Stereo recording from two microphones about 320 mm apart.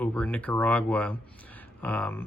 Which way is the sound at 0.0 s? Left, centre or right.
Centre.